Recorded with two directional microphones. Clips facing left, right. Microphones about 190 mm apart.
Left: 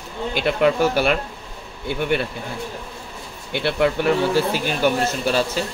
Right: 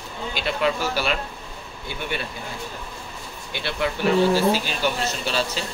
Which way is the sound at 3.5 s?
60° left (ahead or behind).